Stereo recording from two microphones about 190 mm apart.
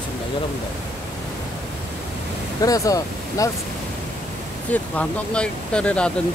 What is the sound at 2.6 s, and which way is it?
Speech, 20° left (ahead or behind).